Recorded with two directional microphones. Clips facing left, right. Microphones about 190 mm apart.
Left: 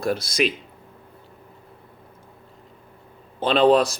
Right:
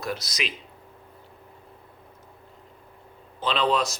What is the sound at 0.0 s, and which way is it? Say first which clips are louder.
Speech: left 9 dB; 50° left (ahead or behind).